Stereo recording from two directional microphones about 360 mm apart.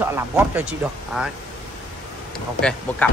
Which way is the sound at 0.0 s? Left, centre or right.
Centre.